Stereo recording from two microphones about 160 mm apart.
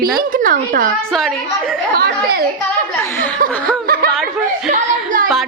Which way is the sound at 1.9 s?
80° right.